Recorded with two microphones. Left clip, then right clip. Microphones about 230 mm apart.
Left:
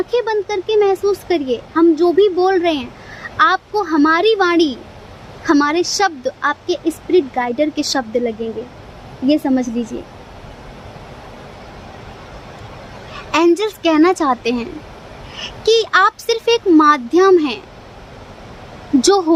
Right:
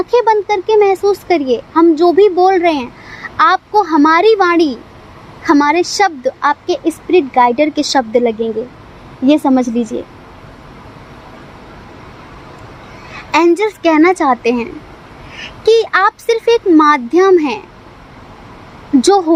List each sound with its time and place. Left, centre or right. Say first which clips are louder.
0.1 s speech: right 10 dB; centre
9.4 s speech: right 5 dB; centre
13.3 s speech: right 3 dB; centre
19.0 s speech: right 3 dB; centre